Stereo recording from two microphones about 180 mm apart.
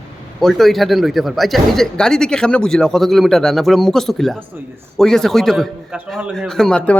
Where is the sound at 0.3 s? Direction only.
Centre (ahead or behind).